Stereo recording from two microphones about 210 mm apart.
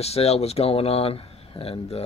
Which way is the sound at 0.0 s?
30° left (ahead or behind).